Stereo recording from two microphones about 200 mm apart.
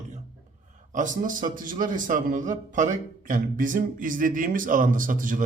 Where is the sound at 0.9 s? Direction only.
40° right (ahead or behind).